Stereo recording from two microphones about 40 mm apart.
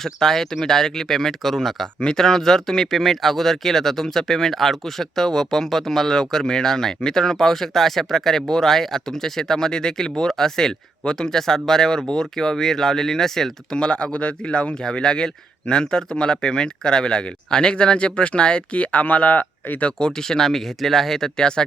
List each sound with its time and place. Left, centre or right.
0.0 s speech: centre
13.7 s speech: left
20.0 s speech: centre